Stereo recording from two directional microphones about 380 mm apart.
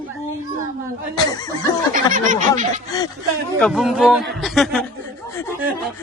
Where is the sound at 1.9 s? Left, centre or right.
Centre.